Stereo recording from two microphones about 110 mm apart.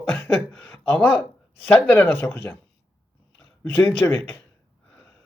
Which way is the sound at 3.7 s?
15° left (ahead or behind).